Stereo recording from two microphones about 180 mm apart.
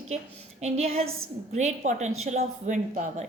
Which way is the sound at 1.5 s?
40° right (ahead or behind).